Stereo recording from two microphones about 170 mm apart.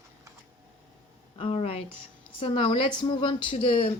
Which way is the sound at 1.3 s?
35° left (ahead or behind).